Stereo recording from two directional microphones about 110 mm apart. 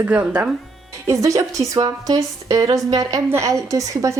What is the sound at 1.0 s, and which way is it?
A woman's voice, 30° right (ahead or behind).